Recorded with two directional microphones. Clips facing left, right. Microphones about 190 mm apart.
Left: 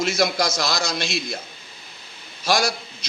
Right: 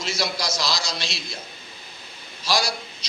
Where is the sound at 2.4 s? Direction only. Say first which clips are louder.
Left 3 dB; 50° left (ahead or behind).